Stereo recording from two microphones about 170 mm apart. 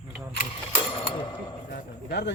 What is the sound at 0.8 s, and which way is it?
Cash register, 30° left (ahead or behind).